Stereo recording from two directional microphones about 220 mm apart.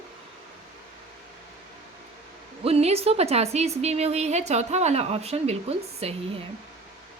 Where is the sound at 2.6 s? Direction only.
30° right (ahead or behind).